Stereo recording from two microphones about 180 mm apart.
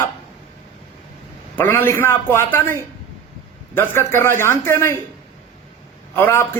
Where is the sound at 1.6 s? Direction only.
10° left (ahead or behind).